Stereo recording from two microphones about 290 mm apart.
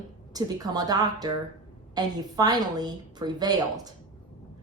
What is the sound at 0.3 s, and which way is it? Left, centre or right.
A woman's voice, centre.